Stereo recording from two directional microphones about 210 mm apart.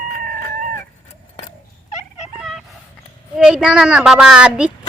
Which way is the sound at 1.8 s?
35° left (ahead or behind).